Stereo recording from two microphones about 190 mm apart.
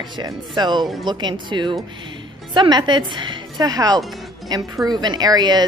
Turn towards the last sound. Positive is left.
turn(degrees=-20)  # may be behind; listen again after turning